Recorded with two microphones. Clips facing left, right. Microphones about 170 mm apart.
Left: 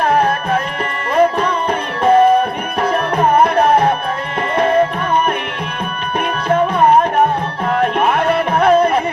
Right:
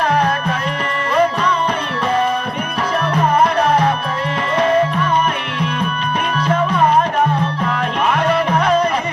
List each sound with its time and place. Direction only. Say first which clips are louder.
0.1 s music: left 3 dB; 50° left (ahead or behind)
6.5 s music: left 4 dB; 55° left (ahead or behind)